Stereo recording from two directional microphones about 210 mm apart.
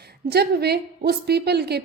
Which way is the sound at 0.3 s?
50° right (ahead or behind).